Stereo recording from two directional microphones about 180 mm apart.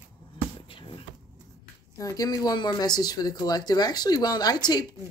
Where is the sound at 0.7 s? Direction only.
30° left (ahead or behind).